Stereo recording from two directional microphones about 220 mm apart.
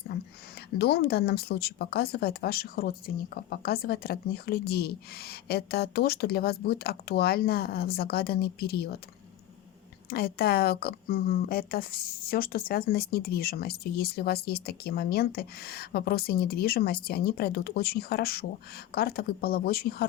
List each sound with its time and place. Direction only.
0.1 s a sound: 45° left (ahead or behind)
0.8 s speech: 45° left (ahead or behind)
10.1 s speech: 45° left (ahead or behind)